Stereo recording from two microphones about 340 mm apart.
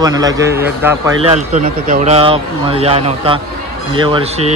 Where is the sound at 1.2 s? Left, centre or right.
Centre.